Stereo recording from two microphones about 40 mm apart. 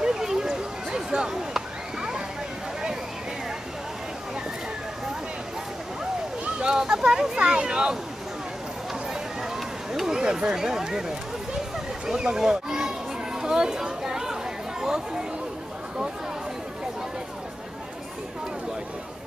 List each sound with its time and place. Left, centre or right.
0.0 s a sound: centre
6.6 s a sound: centre
7.4 s speech: centre
9.9 s speech: centre
12.2 s speech: centre
13.4 s chatter: centre